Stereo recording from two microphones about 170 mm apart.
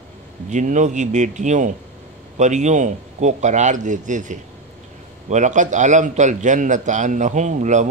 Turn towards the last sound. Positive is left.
turn(degrees=-45)  # may be behind; listen again after turning